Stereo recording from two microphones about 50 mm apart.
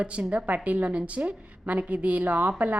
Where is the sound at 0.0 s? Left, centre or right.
Right.